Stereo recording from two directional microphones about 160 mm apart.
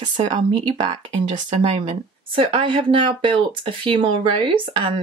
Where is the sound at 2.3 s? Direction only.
30° right (ahead or behind).